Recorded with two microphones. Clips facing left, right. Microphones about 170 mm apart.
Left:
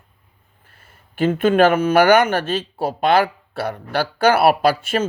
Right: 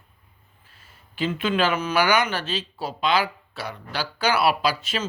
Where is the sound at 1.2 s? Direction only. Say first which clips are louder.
Left 9 dB; 50° left (ahead or behind).